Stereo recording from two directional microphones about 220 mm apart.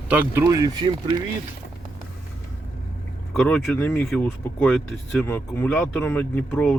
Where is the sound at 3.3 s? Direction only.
5° left (ahead or behind).